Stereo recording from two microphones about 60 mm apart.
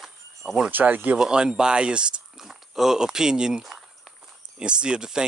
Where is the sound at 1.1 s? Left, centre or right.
Centre.